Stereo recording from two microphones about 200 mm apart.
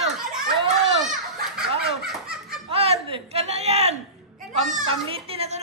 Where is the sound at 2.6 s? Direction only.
30° right (ahead or behind).